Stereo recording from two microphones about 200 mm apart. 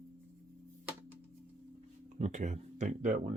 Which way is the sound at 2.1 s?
35° right (ahead or behind).